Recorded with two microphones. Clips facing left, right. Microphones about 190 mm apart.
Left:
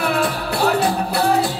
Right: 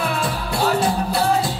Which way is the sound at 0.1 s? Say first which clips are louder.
Left 3 dB; 65° left (ahead or behind).